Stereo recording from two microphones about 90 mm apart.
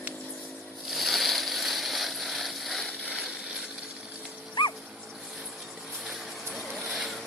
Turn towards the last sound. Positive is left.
turn(degrees=0)  # may be behind; listen again after turning